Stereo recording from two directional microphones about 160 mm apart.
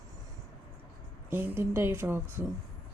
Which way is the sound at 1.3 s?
15° right (ahead or behind).